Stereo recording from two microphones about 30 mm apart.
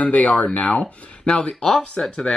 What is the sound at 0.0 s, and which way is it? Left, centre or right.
Speech, left.